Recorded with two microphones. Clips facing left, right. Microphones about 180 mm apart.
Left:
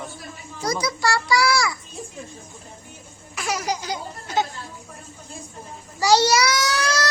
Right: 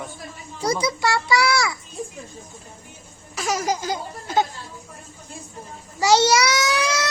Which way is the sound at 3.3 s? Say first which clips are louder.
Right 3 dB; 40° right (ahead or behind).